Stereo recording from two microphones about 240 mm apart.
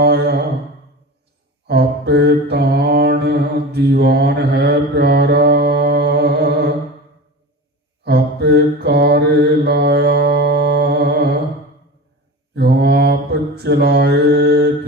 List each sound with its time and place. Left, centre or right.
0.0 s a sound: right
1.6 s mantra: right
8.0 s mantra: right
12.5 s mantra: right